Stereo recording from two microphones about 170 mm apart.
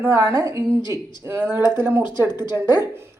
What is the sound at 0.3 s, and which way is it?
A woman's voice, 20° right (ahead or behind).